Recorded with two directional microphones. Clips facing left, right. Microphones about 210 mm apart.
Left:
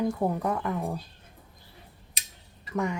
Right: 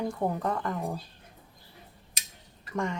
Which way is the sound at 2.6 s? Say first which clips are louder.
Left 2 dB; 5° left (ahead or behind).